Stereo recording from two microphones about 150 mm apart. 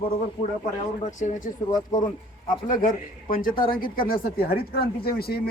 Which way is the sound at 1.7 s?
30° left (ahead or behind).